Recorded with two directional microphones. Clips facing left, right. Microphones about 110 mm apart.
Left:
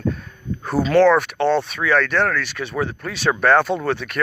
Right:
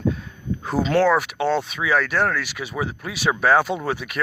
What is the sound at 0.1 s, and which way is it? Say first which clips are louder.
Speech: right 1 dB; 15° right (ahead or behind).